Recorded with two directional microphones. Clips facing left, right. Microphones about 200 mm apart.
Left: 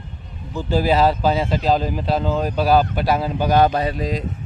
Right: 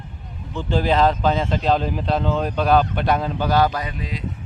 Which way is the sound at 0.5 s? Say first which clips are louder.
Left 2 dB; 5° left (ahead or behind).